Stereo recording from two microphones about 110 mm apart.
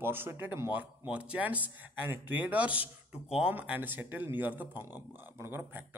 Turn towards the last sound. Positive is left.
turn(degrees=-20)  # may be behind; listen again after turning